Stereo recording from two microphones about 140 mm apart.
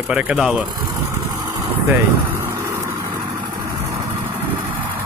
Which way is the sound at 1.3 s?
15° right (ahead or behind).